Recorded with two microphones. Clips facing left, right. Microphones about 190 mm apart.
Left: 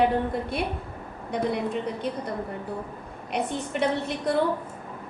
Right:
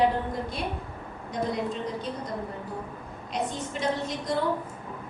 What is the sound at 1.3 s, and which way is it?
Speech, 60° left (ahead or behind).